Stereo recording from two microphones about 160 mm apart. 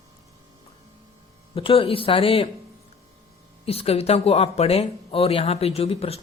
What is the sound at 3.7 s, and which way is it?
Speech, 40° left (ahead or behind).